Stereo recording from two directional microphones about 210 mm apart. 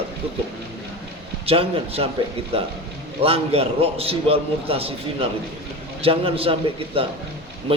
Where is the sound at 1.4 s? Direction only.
30° right (ahead or behind).